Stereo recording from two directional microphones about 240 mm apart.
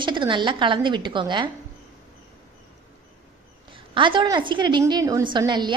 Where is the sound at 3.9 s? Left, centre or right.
Centre.